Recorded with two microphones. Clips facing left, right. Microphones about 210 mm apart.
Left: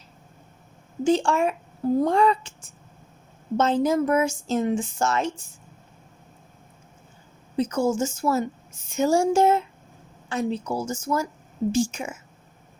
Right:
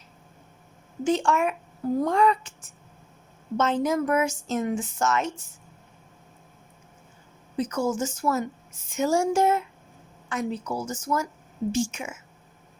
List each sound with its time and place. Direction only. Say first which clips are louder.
1.0 s speech: left 2 dB; 30° left (ahead or behind)
3.6 s speech: left 3 dB; 30° left (ahead or behind)
7.5 s a woman's voice: left 3 dB; 30° left (ahead or behind)